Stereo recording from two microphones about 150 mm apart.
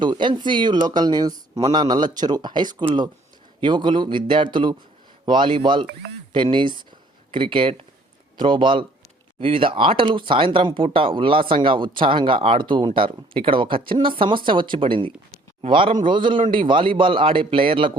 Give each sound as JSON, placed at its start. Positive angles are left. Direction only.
{"t": 0.0, "sound": "speech", "side_deg": -30}